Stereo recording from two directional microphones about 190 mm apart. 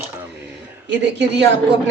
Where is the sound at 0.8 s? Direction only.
65° right (ahead or behind).